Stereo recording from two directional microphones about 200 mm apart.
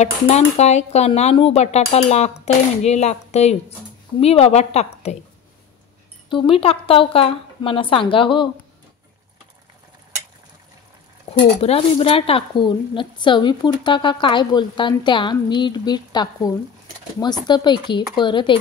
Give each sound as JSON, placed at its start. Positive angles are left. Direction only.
{"t": 0.0, "sound": "speech", "side_deg": 35}
{"t": 6.2, "sound": "speech", "side_deg": 25}
{"t": 11.3, "sound": "speech", "side_deg": 30}